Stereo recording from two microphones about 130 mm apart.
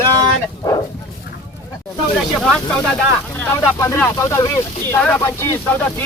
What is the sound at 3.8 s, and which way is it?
Speech, 20° left (ahead or behind).